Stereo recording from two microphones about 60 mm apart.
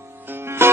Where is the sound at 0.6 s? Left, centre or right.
Right.